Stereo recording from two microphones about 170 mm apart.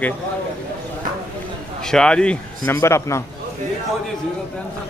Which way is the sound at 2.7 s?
15° left (ahead or behind).